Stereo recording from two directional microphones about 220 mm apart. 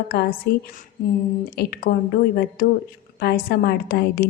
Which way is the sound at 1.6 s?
45° left (ahead or behind).